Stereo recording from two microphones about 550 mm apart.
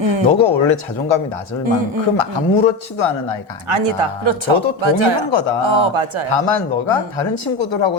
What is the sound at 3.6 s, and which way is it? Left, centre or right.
Speech, right.